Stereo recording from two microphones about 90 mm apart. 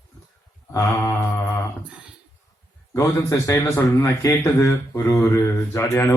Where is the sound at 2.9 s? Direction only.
35° left (ahead or behind).